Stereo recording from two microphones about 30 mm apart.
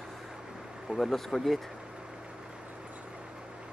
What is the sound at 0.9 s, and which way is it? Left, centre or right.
Speech, centre.